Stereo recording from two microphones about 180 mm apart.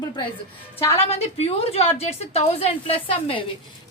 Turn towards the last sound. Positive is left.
turn(degrees=30)  # may be behind; listen again after turning